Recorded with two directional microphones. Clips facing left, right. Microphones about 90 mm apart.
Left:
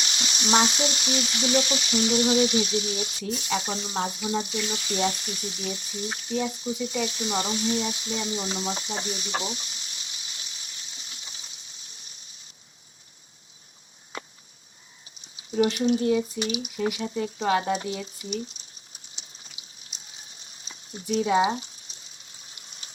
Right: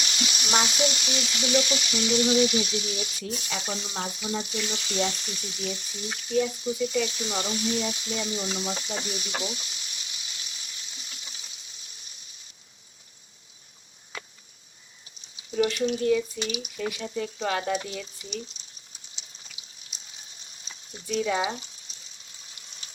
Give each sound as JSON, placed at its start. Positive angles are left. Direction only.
{"t": 0.0, "sound": "speech", "side_deg": 35}
{"t": 15.4, "sound": "speech", "side_deg": 30}
{"t": 20.7, "sound": "speech", "side_deg": 30}